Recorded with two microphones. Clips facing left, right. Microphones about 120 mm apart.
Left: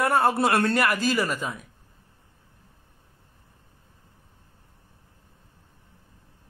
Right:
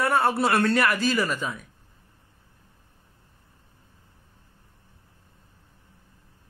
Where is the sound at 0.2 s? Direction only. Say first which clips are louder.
Left 1 dB; 15° left (ahead or behind).